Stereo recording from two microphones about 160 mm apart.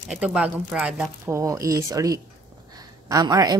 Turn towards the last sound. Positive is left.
turn(degrees=-25)  # may be behind; listen again after turning